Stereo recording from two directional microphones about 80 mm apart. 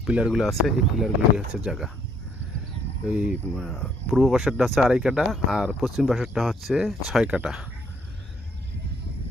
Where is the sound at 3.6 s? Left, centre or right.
Centre.